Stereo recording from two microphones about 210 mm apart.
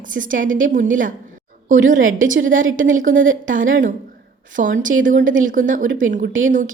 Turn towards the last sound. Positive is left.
turn(degrees=-40)  # may be behind; listen again after turning